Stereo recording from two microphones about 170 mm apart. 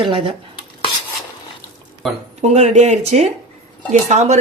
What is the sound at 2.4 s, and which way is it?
Speech, 40° right (ahead or behind).